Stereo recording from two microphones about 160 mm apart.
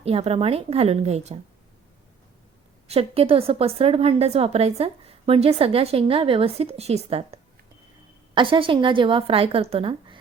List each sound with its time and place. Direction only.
0.0 s a woman's voice: 40° right (ahead or behind)
2.8 s a woman's voice: 40° right (ahead or behind)
8.4 s a woman's voice: 30° right (ahead or behind)